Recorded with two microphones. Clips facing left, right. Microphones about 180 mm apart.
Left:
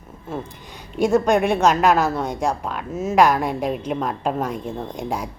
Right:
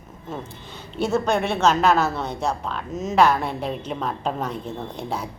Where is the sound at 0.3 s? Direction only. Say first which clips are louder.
Left 3 dB; 10° left (ahead or behind).